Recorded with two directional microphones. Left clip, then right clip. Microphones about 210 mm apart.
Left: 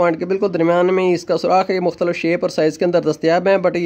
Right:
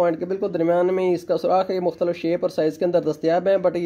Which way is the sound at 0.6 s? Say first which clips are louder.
Left 4 dB; 25° left (ahead or behind).